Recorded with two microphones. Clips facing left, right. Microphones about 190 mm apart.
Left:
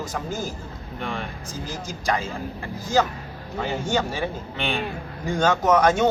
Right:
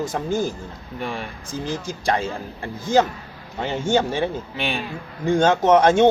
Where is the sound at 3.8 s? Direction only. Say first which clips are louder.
Right 7 dB; 25° right (ahead or behind).